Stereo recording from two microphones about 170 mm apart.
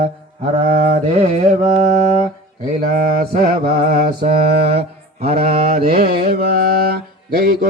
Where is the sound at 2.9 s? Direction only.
55° right (ahead or behind).